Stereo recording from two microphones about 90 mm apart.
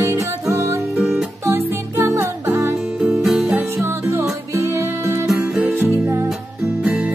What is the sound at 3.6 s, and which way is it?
Music, 30° right (ahead or behind).